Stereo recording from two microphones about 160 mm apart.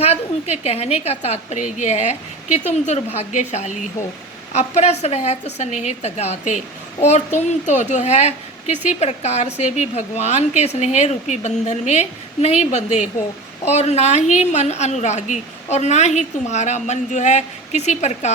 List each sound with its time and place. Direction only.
0.0 s a woman's voice: 40° left (ahead or behind)